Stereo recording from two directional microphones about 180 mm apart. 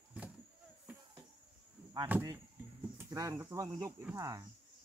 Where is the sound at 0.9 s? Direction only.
10° right (ahead or behind).